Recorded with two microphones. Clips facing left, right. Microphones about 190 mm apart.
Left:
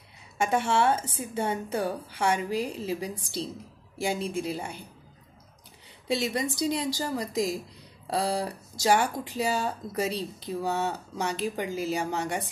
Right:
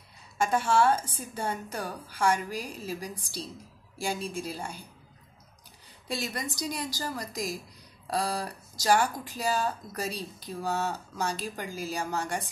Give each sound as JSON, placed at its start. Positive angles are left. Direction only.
{"t": 0.4, "sound": "speech", "side_deg": 20}
{"t": 6.0, "sound": "speech", "side_deg": 25}